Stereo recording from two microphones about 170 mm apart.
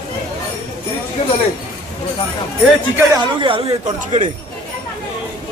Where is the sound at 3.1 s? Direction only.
30° right (ahead or behind).